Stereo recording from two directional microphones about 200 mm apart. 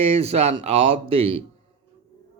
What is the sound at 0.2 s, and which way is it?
Speech, 30° right (ahead or behind).